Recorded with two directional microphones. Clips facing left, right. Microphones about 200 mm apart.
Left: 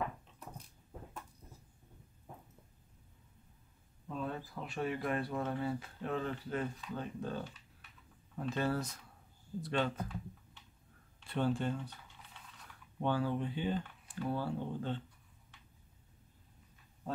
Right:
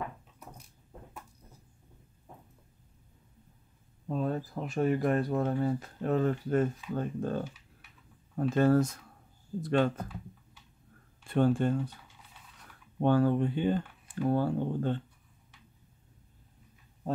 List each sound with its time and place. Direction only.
4.1 s speech: 40° right (ahead or behind)
11.2 s speech: 50° right (ahead or behind)
13.0 s speech: 50° right (ahead or behind)